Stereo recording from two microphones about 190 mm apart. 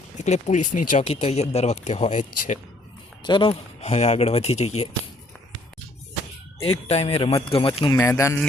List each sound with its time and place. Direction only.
0.2 s speech: 35° left (ahead or behind)
3.2 s speech: 25° left (ahead or behind)
6.6 s speech: 30° left (ahead or behind)
7.9 s speech: 15° left (ahead or behind)